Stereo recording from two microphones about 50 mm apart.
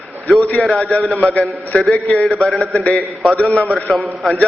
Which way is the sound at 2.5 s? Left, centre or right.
Centre.